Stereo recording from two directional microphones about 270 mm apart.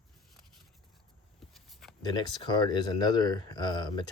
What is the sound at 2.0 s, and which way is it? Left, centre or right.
Speech, centre.